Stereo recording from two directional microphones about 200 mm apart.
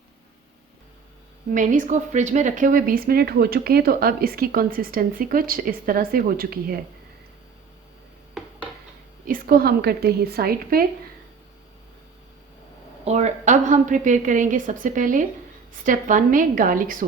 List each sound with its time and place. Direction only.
1.5 s speech: 40° right (ahead or behind)
9.2 s speech: 45° right (ahead or behind)
13.1 s a woman's voice: 35° right (ahead or behind)